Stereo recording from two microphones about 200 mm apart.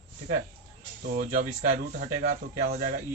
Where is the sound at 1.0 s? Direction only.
45° right (ahead or behind).